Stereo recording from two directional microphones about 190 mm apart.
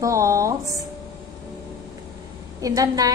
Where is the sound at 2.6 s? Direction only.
20° right (ahead or behind).